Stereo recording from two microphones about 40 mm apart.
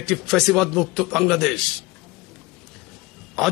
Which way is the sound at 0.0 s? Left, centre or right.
Centre.